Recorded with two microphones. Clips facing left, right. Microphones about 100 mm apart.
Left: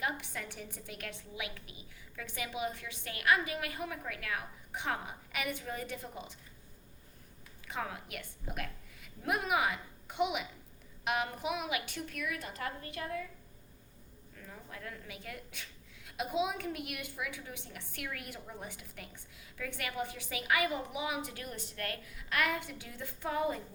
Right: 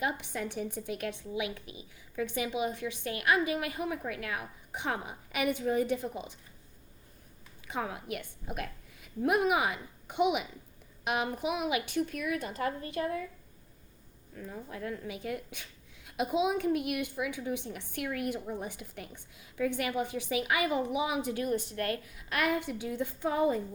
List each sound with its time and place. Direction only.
0.0 s a woman's voice: 20° right (ahead or behind)
7.7 s a woman's voice: 25° right (ahead or behind)
14.4 s a woman's voice: 25° right (ahead or behind)